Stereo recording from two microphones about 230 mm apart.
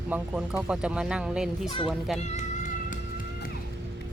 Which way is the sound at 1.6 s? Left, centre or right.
Left.